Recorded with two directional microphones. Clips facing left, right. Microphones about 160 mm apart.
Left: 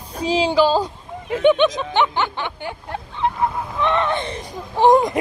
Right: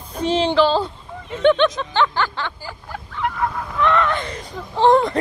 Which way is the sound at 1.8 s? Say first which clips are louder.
Left 1 dB; 15° left (ahead or behind).